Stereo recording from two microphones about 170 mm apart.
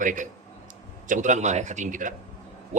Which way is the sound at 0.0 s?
50° right (ahead or behind).